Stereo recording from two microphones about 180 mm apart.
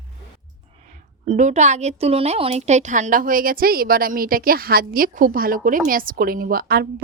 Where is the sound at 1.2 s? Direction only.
40° right (ahead or behind).